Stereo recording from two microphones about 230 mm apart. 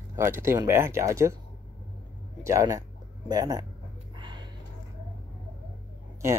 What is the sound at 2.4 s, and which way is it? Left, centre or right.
Speech, centre.